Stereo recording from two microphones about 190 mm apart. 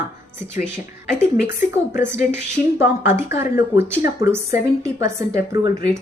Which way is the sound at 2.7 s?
10° right (ahead or behind).